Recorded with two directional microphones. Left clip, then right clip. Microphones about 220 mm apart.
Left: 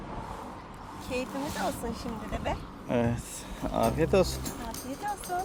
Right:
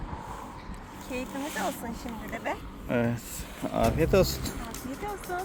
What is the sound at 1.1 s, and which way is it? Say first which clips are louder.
Speech: left 1 dB; 10° left (ahead or behind).